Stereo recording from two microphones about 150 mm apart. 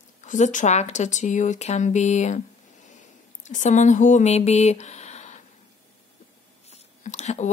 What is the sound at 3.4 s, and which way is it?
Speech, 55° left (ahead or behind).